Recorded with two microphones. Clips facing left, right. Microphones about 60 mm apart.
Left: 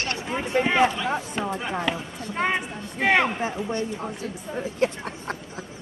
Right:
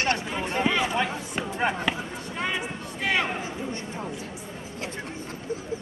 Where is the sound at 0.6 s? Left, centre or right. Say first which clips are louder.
Left 5 dB; left.